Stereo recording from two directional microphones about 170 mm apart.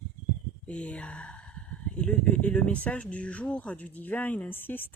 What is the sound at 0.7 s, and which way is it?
Speech, 5° left (ahead or behind).